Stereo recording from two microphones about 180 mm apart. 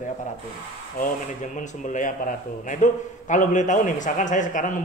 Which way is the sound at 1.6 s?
45° left (ahead or behind).